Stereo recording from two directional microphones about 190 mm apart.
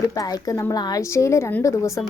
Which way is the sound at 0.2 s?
20° left (ahead or behind).